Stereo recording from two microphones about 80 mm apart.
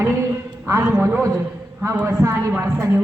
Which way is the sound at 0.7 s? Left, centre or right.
Right.